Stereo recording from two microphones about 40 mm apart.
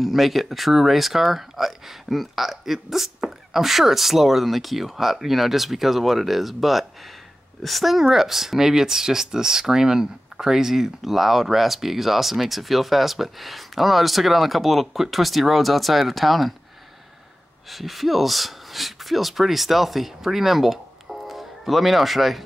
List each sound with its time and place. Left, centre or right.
0.0 s speech: centre
17.6 s speech: centre